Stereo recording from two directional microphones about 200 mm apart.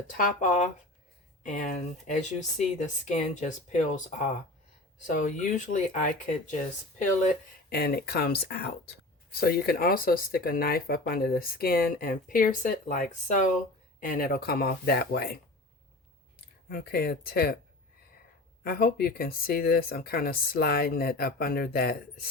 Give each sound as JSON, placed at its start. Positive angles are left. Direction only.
{"t": 0.1, "sound": "speech", "side_deg": 40}
{"t": 5.0, "sound": "speech", "side_deg": 40}
{"t": 7.7, "sound": "speech", "side_deg": 55}
{"t": 16.6, "sound": "speech", "side_deg": 50}
{"t": 18.6, "sound": "speech", "side_deg": 50}